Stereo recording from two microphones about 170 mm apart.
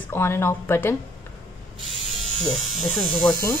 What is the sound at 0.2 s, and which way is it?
Speech, 15° left (ahead or behind).